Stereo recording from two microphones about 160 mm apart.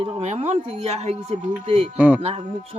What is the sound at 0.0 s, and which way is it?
Speech, 40° right (ahead or behind).